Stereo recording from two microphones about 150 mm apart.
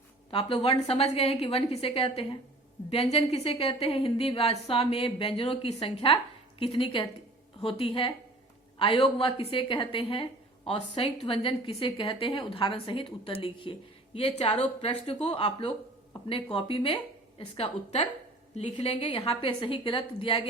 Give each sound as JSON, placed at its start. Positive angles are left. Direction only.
{"t": 0.3, "sound": "a woman's voice", "side_deg": 35}